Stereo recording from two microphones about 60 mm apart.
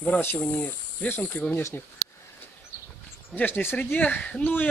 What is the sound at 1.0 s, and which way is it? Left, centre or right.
Speech, left.